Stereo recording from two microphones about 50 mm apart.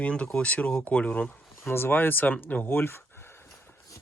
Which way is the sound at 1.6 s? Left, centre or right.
Left.